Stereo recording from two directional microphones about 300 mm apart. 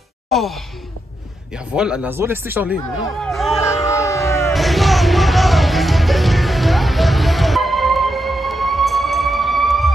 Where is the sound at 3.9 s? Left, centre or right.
Centre.